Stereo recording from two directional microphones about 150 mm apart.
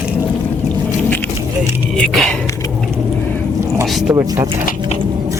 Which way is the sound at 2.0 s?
5° left (ahead or behind).